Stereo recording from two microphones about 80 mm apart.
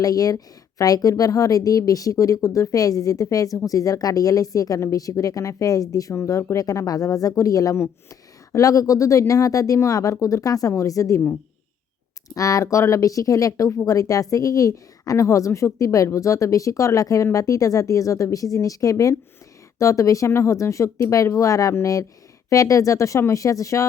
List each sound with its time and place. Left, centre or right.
0.0 s speech: left
12.3 s speech: left